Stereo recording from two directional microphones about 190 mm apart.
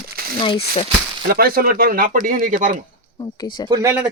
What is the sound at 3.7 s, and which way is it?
Speech, 15° right (ahead or behind).